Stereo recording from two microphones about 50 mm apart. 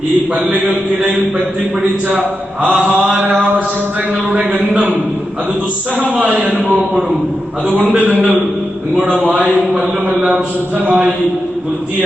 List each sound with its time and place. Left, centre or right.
0.5 s mantra: right
2.8 s mantra: right
6.0 s a man's voice: right
7.7 s mantra: right
9.2 s mantra: right
10.8 s mantra: right